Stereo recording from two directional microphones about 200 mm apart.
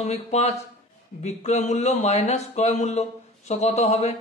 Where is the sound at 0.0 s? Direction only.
35° left (ahead or behind).